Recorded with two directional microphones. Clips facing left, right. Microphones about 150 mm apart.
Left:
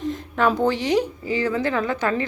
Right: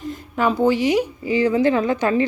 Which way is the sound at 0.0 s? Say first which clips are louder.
Even; 5° right (ahead or behind).